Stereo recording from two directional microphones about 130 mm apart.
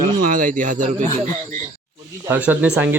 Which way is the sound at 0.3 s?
90° right.